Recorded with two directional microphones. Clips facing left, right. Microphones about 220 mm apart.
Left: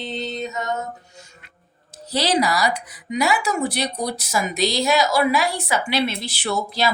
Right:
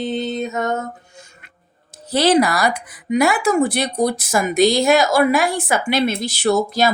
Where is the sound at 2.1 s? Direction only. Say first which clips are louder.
Right 6 dB; 50° right (ahead or behind).